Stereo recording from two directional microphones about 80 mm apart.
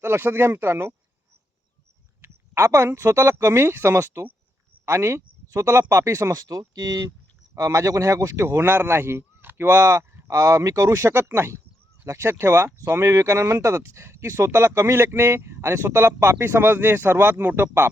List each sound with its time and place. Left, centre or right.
0.0 s speech: right
2.2 s speech: right
8.4 s speech: right